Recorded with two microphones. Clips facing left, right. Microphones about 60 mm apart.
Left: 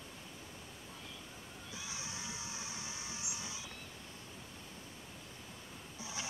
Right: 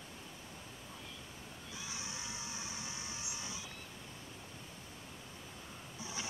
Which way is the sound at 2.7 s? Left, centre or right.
Centre.